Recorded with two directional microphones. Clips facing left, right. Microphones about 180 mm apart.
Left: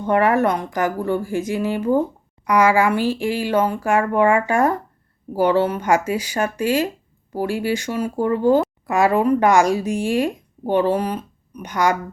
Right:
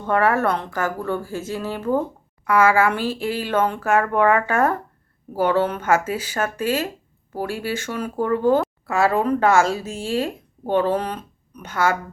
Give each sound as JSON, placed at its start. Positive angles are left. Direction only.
{"t": 0.1, "sound": "a woman's voice", "side_deg": 15}